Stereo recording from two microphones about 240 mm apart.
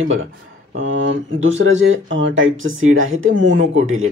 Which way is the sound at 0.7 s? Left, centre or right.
Right.